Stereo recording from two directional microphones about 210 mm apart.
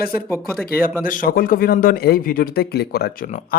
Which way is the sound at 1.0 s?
40° left (ahead or behind).